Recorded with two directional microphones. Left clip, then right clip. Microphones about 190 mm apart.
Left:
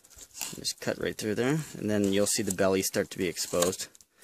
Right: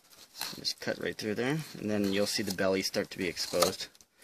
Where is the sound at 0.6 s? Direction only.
35° left (ahead or behind).